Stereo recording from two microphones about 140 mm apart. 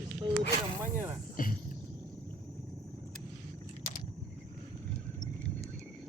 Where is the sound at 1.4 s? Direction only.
85° left.